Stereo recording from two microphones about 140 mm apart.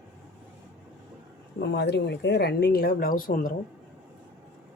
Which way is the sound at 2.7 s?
90° left.